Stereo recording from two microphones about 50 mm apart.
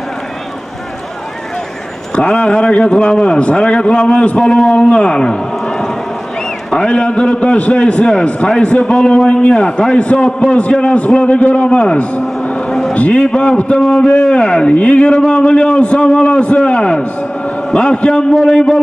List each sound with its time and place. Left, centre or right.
2.1 s a man's voice: centre
12.6 s a sound: centre
12.9 s a man's voice: left
13.2 s a man's voice: centre